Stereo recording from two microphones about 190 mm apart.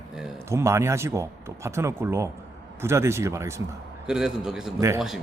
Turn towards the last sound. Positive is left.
turn(degrees=0)  # may be behind; listen again after turning